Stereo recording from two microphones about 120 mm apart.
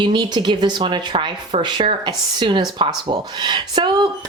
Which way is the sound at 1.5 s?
60° right (ahead or behind).